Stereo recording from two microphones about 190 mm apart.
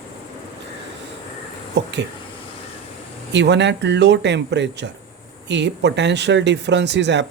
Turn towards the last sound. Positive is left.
turn(degrees=-65)  # may be behind; listen again after turning